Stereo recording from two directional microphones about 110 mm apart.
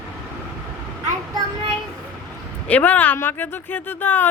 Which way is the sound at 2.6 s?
15° left (ahead or behind).